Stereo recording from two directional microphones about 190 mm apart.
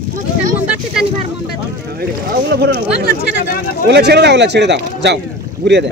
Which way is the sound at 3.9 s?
60° right (ahead or behind).